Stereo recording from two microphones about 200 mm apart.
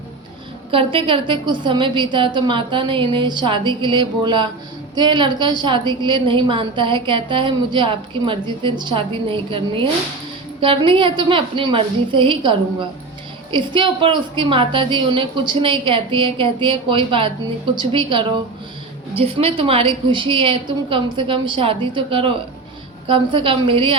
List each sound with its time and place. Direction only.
0.7 s a woman's voice: 25° right (ahead or behind)